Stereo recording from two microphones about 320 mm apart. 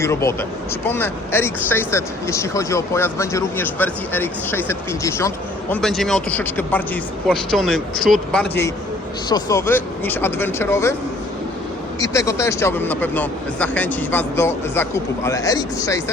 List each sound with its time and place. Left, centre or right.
0.0 s speech: centre
11.9 s speech: centre